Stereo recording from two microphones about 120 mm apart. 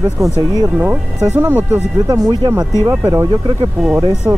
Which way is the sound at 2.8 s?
20° right (ahead or behind).